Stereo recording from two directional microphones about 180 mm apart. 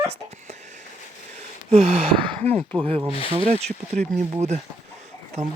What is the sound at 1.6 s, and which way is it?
Speech, 35° right (ahead or behind).